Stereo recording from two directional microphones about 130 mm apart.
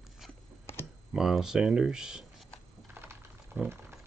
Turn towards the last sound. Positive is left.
turn(degrees=-15)  # may be behind; listen again after turning